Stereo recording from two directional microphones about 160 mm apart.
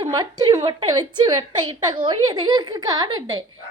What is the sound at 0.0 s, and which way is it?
A woman's voice, 25° right (ahead or behind).